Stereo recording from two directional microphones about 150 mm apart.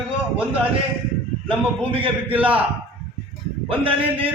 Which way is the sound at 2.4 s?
10° right (ahead or behind).